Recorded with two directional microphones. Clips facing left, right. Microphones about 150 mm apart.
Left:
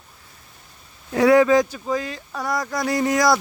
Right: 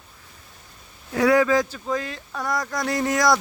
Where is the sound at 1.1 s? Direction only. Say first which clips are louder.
Left 4 dB; 25° left (ahead or behind).